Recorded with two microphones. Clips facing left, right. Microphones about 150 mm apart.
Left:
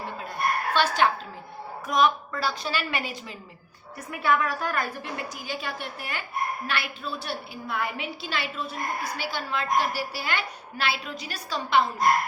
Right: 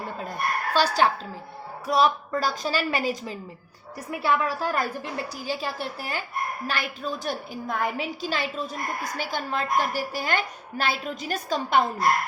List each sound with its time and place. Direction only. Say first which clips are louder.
0.7 s a woman's voice: right 2 dB; 35° right (ahead or behind)